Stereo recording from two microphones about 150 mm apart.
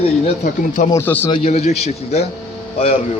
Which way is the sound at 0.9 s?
15° left (ahead or behind).